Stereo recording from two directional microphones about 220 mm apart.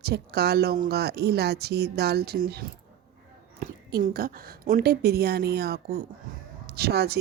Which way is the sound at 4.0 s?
40° right (ahead or behind).